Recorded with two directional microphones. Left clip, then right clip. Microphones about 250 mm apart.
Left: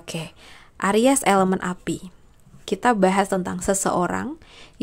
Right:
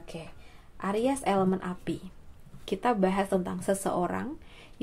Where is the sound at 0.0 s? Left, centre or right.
Left.